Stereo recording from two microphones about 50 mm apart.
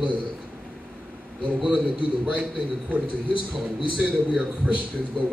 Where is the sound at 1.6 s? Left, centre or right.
Right.